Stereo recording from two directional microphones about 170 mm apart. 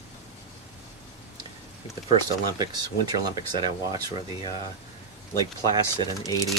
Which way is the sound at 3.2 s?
20° right (ahead or behind).